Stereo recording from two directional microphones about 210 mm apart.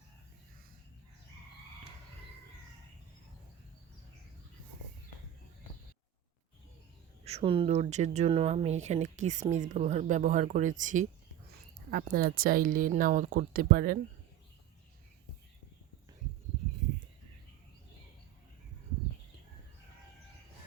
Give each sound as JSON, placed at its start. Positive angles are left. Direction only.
{"t": 7.3, "sound": "speech", "side_deg": -30}